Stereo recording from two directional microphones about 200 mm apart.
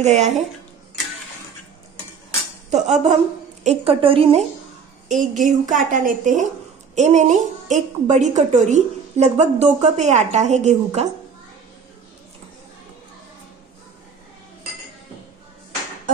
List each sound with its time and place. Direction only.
0.0 s a woman's voice: 35° right (ahead or behind)
2.7 s a woman's voice: 35° right (ahead or behind)
5.0 s a woman's voice: 40° right (ahead or behind)